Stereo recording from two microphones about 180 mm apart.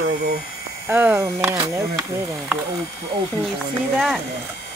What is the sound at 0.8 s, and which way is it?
Speech, 10° right (ahead or behind).